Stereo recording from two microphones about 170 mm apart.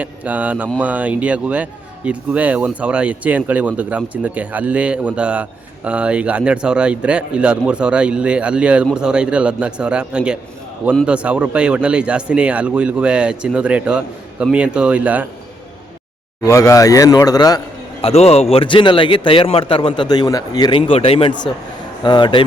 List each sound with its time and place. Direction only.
0.0 s speech: 10° right (ahead or behind)
16.4 s a man's voice: 20° left (ahead or behind)
18.0 s a man's voice: 35° left (ahead or behind)